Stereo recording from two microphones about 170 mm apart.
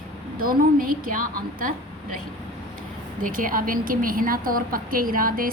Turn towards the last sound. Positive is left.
turn(degrees=-55)  # may be behind; listen again after turning